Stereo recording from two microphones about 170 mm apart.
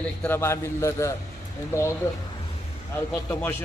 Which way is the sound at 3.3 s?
15° left (ahead or behind).